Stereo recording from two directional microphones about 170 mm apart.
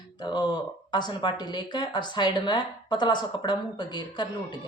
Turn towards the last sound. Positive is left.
turn(degrees=25)  # may be behind; listen again after turning